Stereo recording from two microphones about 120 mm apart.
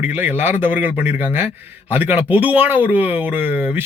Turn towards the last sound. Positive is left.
turn(degrees=-15)  # may be behind; listen again after turning